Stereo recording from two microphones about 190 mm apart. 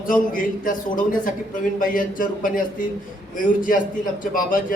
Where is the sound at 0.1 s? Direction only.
45° left (ahead or behind).